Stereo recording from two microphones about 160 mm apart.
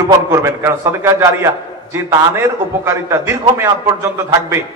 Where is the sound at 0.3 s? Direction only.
15° right (ahead or behind).